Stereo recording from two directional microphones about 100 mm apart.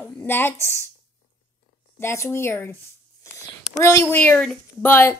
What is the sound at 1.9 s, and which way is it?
Speech, 25° left (ahead or behind).